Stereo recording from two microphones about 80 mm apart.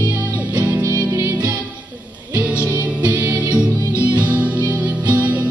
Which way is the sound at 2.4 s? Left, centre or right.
Right.